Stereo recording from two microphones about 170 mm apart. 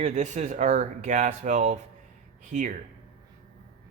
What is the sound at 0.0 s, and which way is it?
Speech, 45° right (ahead or behind).